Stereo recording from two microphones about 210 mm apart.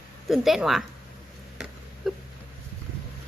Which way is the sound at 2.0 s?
Centre (ahead or behind).